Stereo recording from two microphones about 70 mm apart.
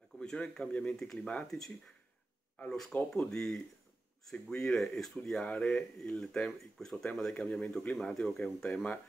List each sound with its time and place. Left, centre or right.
0.2 s speech: centre
2.6 s speech: centre
8.6 s speech: centre